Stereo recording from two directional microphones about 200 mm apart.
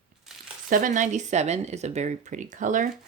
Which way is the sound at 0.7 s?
40° right (ahead or behind).